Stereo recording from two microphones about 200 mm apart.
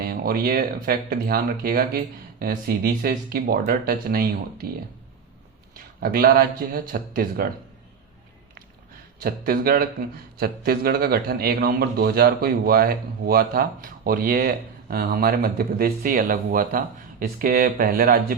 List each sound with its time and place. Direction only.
0.0 s a man's voice: 50° right (ahead or behind)
6.0 s a man's voice: 50° right (ahead or behind)
9.2 s a man's voice: 50° right (ahead or behind)